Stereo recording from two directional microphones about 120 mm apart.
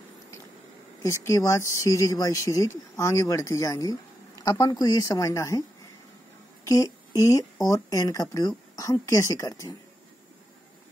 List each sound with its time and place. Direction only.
1.0 s speech: 25° left (ahead or behind)
6.6 s speech: 25° left (ahead or behind)